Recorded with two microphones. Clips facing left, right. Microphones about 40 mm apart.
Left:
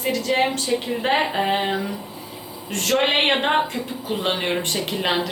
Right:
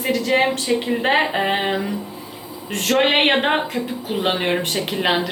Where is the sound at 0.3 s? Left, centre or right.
Centre.